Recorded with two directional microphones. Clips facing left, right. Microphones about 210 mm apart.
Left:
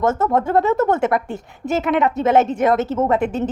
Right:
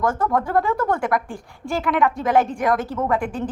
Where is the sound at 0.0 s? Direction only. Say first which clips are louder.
Left 3 dB; 25° left (ahead or behind).